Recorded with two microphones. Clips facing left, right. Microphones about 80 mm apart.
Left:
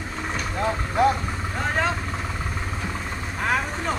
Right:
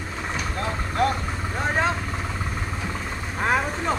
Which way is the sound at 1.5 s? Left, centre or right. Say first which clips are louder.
Right 1 dB; centre.